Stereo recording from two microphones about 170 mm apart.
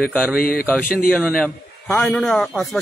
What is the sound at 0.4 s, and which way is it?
Speech, 60° left (ahead or behind).